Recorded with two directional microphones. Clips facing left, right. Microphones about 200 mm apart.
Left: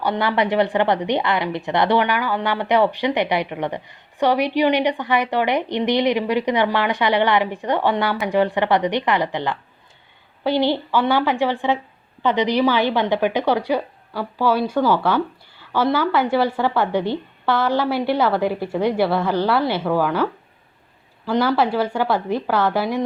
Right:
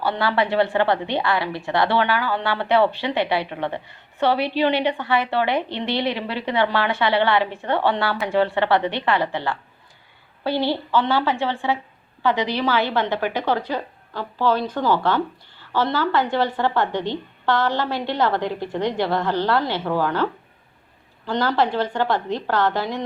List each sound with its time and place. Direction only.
0.0 s a woman's voice: 15° left (ahead or behind)
21.2 s a woman's voice: 10° left (ahead or behind)